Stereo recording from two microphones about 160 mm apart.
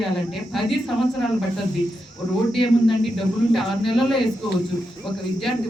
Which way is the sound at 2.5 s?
Centre (ahead or behind).